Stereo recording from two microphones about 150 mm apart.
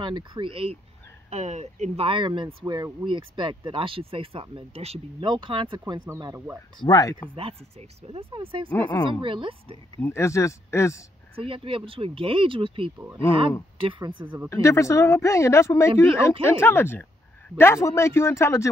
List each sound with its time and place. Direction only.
0.0 s speech: 35° right (ahead or behind)
1.3 s speech: 50° right (ahead or behind); by 6.4 s 25° right (ahead or behind)
6.8 s speech: 25° left (ahead or behind)
8.1 s speech: 35° right (ahead or behind)
8.6 s speech: 15° left (ahead or behind)
9.2 s speech: 35° right (ahead or behind)
9.9 s speech: 20° left (ahead or behind)
11.3 s speech: 35° right (ahead or behind)
14.5 s speech: 20° left (ahead or behind)